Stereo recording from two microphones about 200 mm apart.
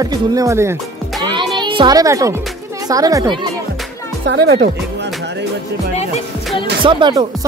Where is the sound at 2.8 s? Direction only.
20° right (ahead or behind).